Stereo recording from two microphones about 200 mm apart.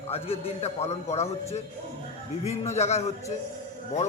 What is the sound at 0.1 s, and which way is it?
A man's voice, 30° left (ahead or behind).